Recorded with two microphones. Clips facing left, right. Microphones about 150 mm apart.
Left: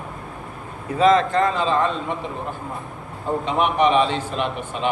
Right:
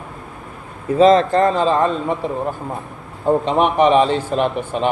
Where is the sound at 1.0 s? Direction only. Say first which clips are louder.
Right 4 dB; 30° right (ahead or behind).